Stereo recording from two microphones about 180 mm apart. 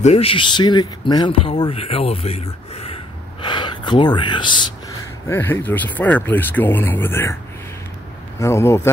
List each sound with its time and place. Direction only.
0.0 s speech: 35° left (ahead or behind)
5.3 s speech: 10° left (ahead or behind)
8.4 s speech: 15° left (ahead or behind)